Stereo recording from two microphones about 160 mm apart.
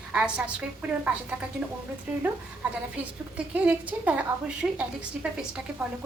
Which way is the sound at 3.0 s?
10° right (ahead or behind).